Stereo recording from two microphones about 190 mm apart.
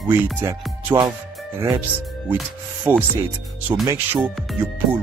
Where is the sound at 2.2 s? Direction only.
10° right (ahead or behind).